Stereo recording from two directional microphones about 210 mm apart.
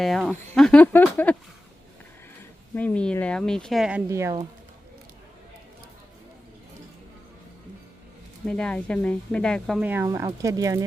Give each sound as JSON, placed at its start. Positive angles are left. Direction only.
{"t": 0.0, "sound": "speech", "side_deg": 0}
{"t": 2.7, "sound": "speech", "side_deg": 5}
{"t": 8.4, "sound": "speech", "side_deg": 5}
{"t": 9.9, "sound": "speech", "side_deg": -10}